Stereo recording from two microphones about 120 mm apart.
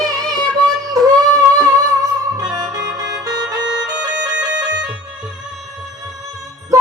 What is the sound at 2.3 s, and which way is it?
Music, 35° right (ahead or behind).